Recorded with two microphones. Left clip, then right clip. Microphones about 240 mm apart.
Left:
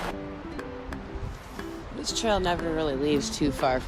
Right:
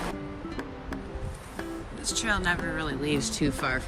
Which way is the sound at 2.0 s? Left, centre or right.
Centre.